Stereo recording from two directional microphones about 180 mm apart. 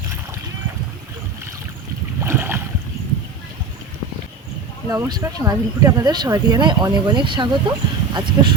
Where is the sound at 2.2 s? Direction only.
10° right (ahead or behind).